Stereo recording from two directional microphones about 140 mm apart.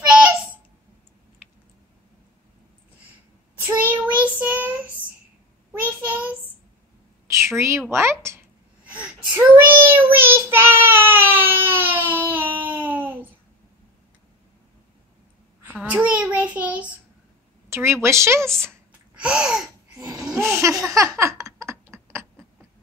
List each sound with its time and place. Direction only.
3.6 s child singing: 15° right (ahead or behind)
7.2 s a sound: 20° right (ahead or behind)
7.9 s speech: 20° right (ahead or behind)
8.9 s child singing: 10° right (ahead or behind)
15.8 s child singing: 10° right (ahead or behind)
17.6 s speech: 20° right (ahead or behind)
18.7 s gasp: 10° right (ahead or behind)
20.2 s a sound: 10° right (ahead or behind)